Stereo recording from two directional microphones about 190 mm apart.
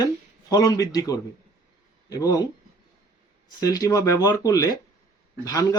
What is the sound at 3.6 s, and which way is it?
Speech, 20° left (ahead or behind).